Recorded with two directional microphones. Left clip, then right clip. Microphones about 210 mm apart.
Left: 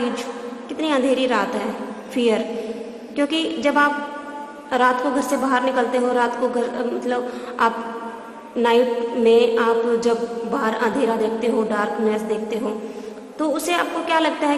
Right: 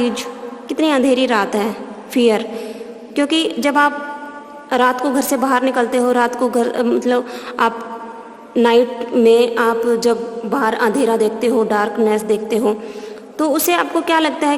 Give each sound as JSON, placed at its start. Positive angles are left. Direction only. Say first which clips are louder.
{"t": 0.7, "sound": "a woman's voice", "louder": "right 5 dB", "side_deg": -50}